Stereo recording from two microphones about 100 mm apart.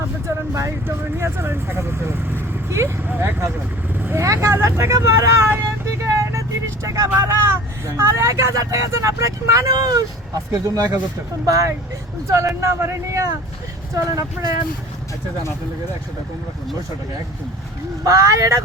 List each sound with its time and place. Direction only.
0.3 s speech: 30° right (ahead or behind)
3.9 s vehicle: 20° right (ahead or behind)
4.2 s speech: 30° right (ahead or behind)
18.0 s speech: 35° right (ahead or behind)